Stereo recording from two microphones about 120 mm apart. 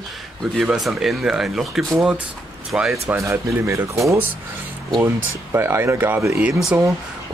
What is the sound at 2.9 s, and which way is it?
Speech, 25° right (ahead or behind).